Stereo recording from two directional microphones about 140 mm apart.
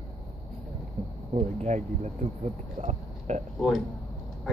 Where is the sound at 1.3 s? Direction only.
50° right (ahead or behind).